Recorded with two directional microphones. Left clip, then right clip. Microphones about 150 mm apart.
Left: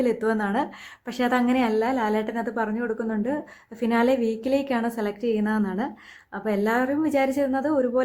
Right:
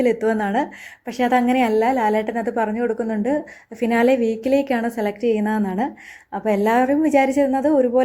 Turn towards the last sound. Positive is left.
turn(degrees=-15)  # may be behind; listen again after turning